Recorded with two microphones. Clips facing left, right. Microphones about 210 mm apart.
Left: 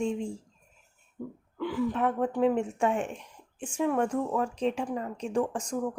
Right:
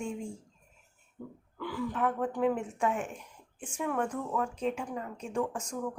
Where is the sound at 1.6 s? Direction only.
20° left (ahead or behind).